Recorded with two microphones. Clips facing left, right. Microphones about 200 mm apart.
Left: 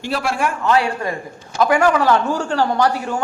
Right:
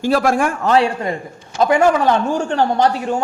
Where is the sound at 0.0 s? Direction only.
45° right (ahead or behind).